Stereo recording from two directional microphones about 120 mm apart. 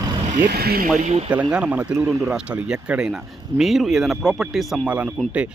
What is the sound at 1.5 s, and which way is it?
Speech, 10° right (ahead or behind).